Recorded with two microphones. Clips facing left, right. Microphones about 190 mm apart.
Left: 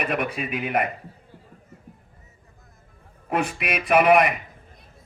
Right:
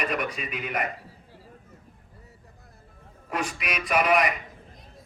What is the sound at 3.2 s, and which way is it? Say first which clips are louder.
A man's voice: left 5 dB; 55° left (ahead or behind).